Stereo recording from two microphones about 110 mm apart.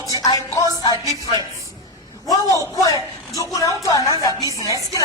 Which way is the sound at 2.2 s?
30° left (ahead or behind).